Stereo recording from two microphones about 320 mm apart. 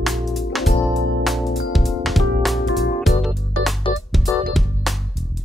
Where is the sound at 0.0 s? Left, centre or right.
Centre.